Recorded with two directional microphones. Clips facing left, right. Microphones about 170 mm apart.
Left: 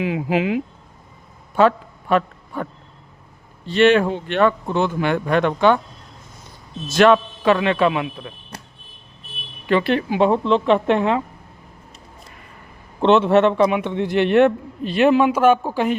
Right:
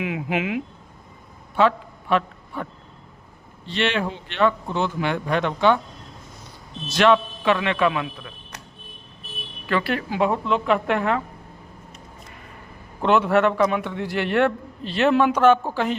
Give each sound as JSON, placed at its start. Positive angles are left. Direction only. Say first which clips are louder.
{"t": 0.0, "sound": "a man's voice", "louder": "left 5 dB", "side_deg": 35}
{"t": 1.5, "sound": "a sound", "louder": "left 4 dB", "side_deg": 45}
{"t": 3.7, "sound": "speech", "louder": "left 9 dB", "side_deg": 45}
{"t": 6.8, "sound": "a man's voice", "louder": "left 4 dB", "side_deg": 45}
{"t": 8.2, "sound": "a sound", "louder": "left 4 dB", "side_deg": 30}
{"t": 9.6, "sound": "a man's voice", "louder": "left 6 dB", "side_deg": 20}
{"t": 13.0, "sound": "a man's voice", "louder": "left 4 dB", "side_deg": 25}